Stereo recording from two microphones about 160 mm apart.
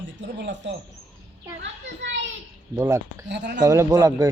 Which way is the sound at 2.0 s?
90° right.